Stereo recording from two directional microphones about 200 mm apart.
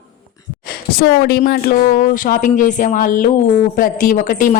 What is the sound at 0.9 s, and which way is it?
A woman's voice, 50° left (ahead or behind).